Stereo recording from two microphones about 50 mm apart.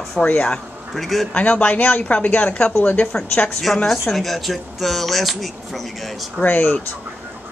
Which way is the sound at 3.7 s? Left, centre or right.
Centre.